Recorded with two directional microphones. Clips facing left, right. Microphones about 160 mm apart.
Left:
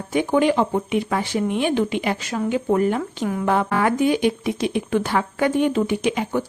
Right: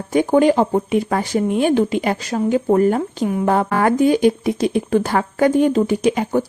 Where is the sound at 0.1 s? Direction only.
40° right (ahead or behind).